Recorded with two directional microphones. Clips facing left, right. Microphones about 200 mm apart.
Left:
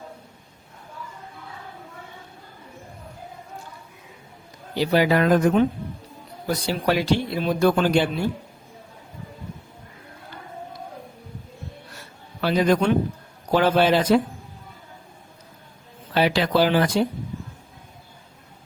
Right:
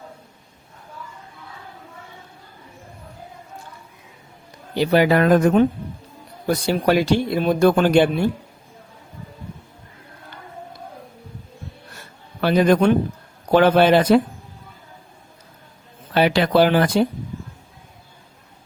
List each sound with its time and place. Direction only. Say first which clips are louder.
4.7 s speech: right 3 dB; 55° right (ahead or behind)
12.4 s speech: right 4 dB; 55° right (ahead or behind)
16.1 s speech: right 4 dB; 60° right (ahead or behind)